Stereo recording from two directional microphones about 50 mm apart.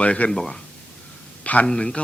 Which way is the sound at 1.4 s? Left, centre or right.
Left.